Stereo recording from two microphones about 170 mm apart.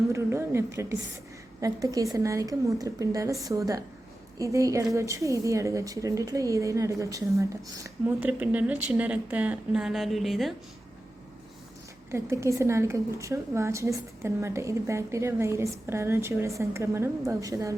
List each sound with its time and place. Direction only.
0.1 s a woman's voice: 15° right (ahead or behind); by 10.5 s centre (ahead or behind)
12.1 s a woman's voice: 15° right (ahead or behind)